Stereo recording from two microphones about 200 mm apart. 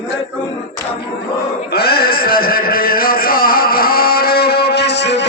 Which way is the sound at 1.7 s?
50° left (ahead or behind).